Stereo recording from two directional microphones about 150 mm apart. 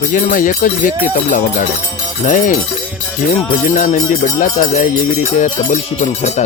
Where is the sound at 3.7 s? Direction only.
60° left (ahead or behind).